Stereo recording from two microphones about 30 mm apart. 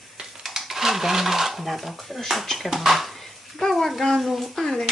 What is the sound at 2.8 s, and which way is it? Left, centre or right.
Speech, centre.